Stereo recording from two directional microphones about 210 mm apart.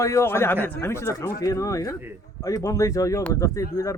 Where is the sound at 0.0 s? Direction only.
15° left (ahead or behind).